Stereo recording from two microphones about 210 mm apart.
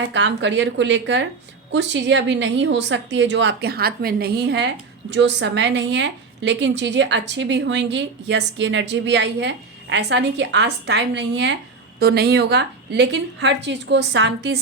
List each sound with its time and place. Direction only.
0.1 s a woman's voice: 60° right (ahead or behind)